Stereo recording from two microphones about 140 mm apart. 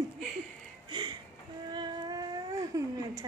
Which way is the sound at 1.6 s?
30° right (ahead or behind).